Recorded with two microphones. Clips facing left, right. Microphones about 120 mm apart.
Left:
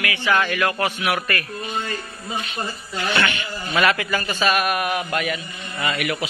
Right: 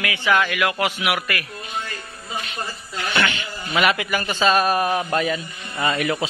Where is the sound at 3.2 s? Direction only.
15° right (ahead or behind).